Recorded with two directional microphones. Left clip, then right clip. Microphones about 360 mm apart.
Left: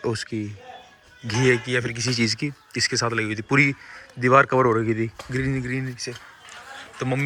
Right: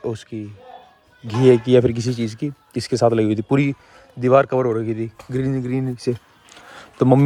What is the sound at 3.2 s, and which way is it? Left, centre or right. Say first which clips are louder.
Speech: right 1 dB; centre.